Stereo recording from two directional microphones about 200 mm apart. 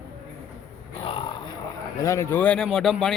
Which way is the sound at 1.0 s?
25° left (ahead or behind).